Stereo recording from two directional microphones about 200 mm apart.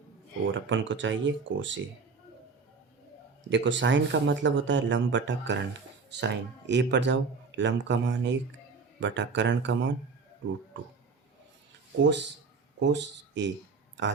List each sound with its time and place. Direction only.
0.5 s speech: 70° right (ahead or behind)
3.5 s speech: 65° right (ahead or behind)
12.0 s speech: 60° right (ahead or behind)